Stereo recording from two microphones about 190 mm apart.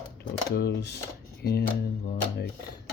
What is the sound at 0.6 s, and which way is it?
Speech, 60° left (ahead or behind).